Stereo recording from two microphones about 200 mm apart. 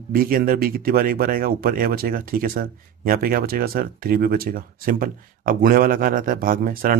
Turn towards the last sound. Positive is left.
turn(degrees=-45)  # may be behind; listen again after turning